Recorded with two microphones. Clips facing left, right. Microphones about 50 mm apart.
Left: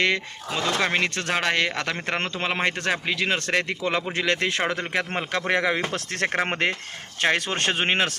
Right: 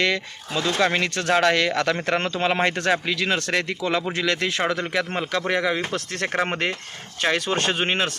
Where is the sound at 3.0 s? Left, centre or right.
Left.